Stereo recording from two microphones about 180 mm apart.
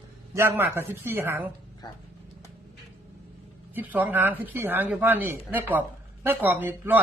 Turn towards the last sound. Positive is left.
turn(degrees=-10)  # may be behind; listen again after turning